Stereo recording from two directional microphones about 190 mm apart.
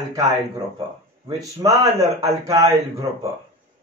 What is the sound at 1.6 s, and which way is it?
Speech, 15° right (ahead or behind).